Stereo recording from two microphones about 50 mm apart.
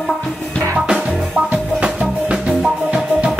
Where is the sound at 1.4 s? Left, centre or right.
Centre.